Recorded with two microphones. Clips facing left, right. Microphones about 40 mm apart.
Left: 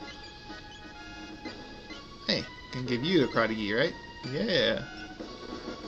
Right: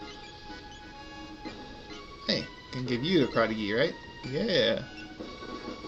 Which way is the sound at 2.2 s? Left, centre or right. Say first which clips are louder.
Even; centre.